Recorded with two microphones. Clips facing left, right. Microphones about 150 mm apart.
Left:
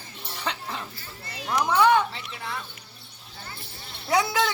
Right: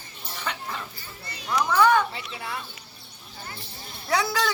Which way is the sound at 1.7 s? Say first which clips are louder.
Even; 25° left (ahead or behind).